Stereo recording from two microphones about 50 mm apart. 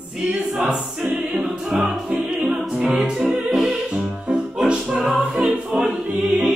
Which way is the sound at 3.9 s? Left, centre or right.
Centre.